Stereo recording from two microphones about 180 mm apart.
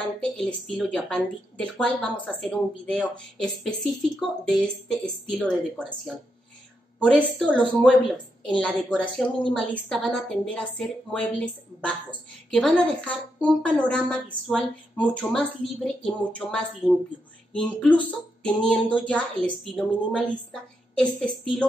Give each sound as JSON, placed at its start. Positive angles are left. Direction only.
{"t": 0.0, "sound": "a woman's voice", "side_deg": 5}